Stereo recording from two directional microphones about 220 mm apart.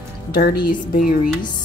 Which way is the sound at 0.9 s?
40° left (ahead or behind).